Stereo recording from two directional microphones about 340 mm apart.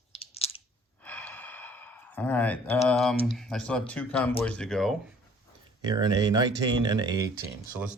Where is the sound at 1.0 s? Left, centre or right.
Centre.